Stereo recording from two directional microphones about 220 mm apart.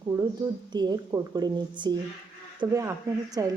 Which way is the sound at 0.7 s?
20° right (ahead or behind).